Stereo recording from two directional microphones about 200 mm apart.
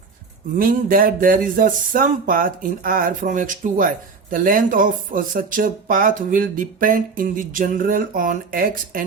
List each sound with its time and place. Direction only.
0.6 s speech: 45° right (ahead or behind)